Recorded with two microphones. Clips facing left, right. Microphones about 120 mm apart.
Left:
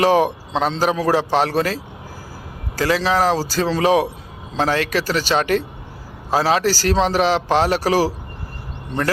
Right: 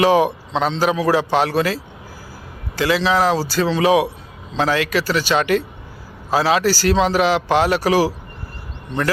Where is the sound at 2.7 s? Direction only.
40° left (ahead or behind).